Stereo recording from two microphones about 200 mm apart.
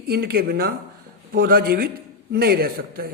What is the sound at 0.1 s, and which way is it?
A man's voice, 50° right (ahead or behind).